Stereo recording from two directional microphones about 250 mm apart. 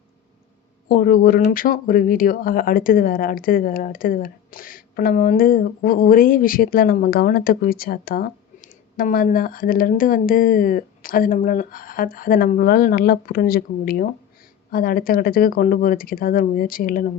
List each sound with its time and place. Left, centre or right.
0.9 s speech: left